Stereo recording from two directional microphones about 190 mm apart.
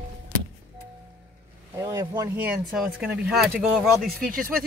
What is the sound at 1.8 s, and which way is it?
Speech, 20° right (ahead or behind).